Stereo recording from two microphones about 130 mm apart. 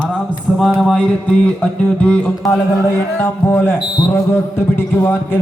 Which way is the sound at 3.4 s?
15° left (ahead or behind).